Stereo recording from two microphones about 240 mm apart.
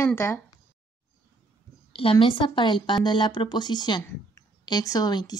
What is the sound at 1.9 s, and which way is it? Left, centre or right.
A woman's voice, left.